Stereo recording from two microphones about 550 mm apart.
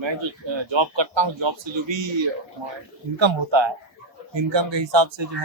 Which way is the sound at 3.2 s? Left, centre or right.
Right.